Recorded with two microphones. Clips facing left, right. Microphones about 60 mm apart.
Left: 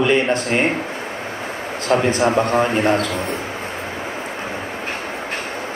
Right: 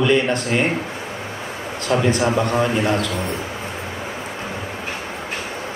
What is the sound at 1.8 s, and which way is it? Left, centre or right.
A man's voice, left.